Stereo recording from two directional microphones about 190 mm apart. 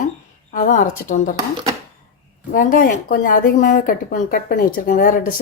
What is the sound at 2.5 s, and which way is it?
A woman's voice, 45° left (ahead or behind).